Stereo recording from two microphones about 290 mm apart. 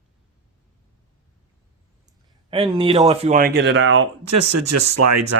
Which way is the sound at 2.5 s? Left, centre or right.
Centre.